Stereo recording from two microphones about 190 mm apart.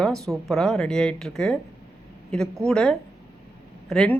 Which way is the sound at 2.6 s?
5° left (ahead or behind).